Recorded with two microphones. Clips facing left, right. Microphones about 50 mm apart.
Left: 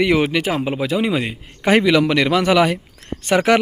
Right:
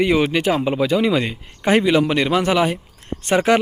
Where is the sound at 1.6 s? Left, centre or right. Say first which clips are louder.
Left 1 dB; left.